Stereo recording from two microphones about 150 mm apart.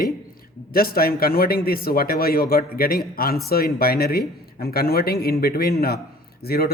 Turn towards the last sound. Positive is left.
turn(degrees=90)